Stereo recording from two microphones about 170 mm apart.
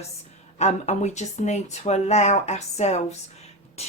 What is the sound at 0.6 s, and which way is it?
Speech, 40° left (ahead or behind).